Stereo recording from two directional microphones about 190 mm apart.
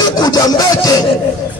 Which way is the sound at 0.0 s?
20° left (ahead or behind).